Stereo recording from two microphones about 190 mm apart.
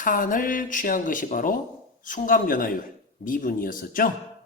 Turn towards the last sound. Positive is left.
turn(degrees=45)  # may be behind; listen again after turning